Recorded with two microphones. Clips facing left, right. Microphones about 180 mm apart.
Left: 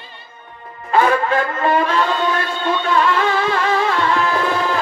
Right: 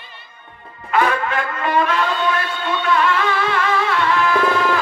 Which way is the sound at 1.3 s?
30° left (ahead or behind).